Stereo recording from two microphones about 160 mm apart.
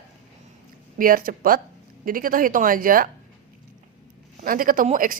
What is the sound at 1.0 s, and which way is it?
A woman's voice, 60° right (ahead or behind).